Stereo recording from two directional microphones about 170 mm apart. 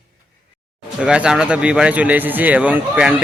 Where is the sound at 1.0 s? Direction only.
5° right (ahead or behind).